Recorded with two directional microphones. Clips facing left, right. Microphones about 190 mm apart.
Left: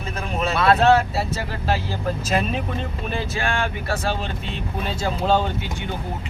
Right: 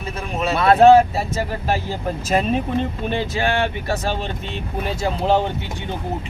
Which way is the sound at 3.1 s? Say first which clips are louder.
Right 2 dB; 25° right (ahead or behind).